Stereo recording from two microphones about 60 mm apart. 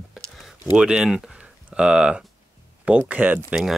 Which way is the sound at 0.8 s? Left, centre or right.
Centre.